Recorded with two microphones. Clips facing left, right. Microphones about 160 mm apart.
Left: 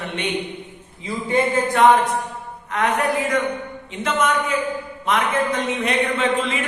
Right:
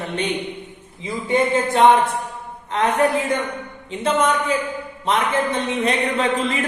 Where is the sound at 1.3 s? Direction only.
25° right (ahead or behind); by 6.7 s 40° right (ahead or behind).